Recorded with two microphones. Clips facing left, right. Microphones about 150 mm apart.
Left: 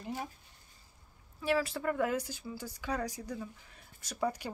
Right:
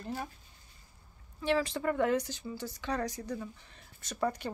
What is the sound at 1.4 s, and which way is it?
Speech, 5° left (ahead or behind).